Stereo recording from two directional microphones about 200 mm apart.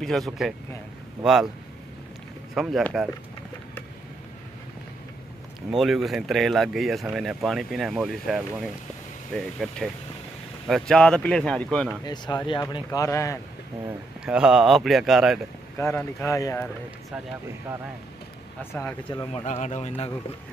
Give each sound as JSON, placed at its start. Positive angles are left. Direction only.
{"t": 0.0, "sound": "speech", "side_deg": 0}
{"t": 2.5, "sound": "speech", "side_deg": 0}
{"t": 5.8, "sound": "speech", "side_deg": 0}
{"t": 12.0, "sound": "speech", "side_deg": 20}
{"t": 13.8, "sound": "speech", "side_deg": -5}
{"t": 15.8, "sound": "speech", "side_deg": 10}
{"t": 18.6, "sound": "speech", "side_deg": 10}
{"t": 19.0, "sound": "speech", "side_deg": 25}
{"t": 19.4, "sound": "speech", "side_deg": 35}